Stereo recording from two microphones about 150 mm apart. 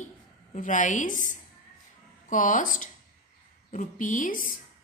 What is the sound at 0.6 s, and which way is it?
A woman's voice, 60° left (ahead or behind).